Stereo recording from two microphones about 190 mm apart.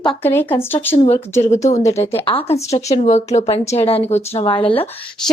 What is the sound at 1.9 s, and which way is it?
Speech, 30° left (ahead or behind).